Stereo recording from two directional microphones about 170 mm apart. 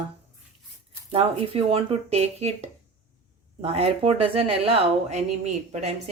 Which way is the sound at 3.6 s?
35° right (ahead or behind).